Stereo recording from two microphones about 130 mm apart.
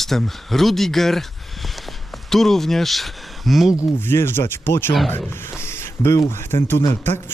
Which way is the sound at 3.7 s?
20° left (ahead or behind).